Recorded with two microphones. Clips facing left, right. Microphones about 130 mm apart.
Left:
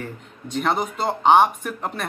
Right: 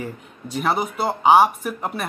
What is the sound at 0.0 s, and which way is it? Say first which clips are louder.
Speech: right 2 dB; 5° right (ahead or behind).